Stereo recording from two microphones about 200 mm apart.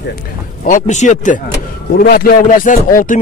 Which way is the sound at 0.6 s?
40° left (ahead or behind).